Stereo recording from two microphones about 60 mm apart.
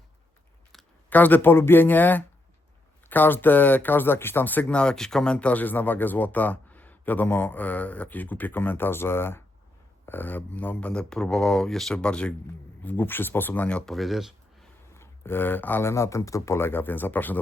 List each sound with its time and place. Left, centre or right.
1.1 s speech: left
4.6 s speech: centre
11.1 s speech: centre
12.0 s speech: centre
12.8 s speech: left
13.8 s speech: centre
14.9 s speech: left
15.8 s speech: left
16.6 s speech: left